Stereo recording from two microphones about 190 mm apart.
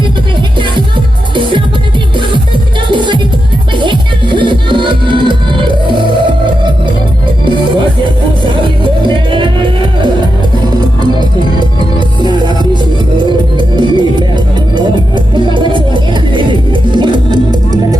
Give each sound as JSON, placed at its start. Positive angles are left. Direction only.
{"t": 1.4, "sound": "music", "side_deg": -25}
{"t": 2.9, "sound": "music", "side_deg": -25}
{"t": 8.8, "sound": "music", "side_deg": -25}
{"t": 10.8, "sound": "music", "side_deg": -25}
{"t": 13.6, "sound": "music", "side_deg": -25}